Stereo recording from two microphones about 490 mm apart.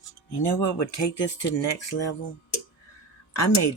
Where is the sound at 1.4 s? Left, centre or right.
Left.